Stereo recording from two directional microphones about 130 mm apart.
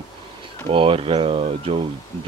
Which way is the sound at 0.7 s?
45° right (ahead or behind).